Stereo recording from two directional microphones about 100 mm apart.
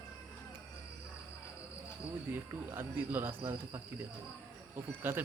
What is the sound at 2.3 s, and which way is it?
Speech, 20° right (ahead or behind).